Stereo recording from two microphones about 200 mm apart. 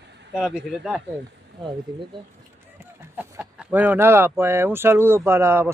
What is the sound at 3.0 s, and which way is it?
Speech, 10° right (ahead or behind).